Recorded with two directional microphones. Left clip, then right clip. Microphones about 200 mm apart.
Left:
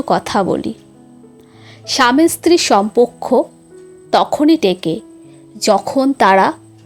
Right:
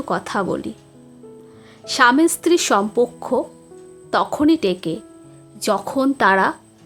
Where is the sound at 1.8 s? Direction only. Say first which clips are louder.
Left 2 dB; 15° left (ahead or behind).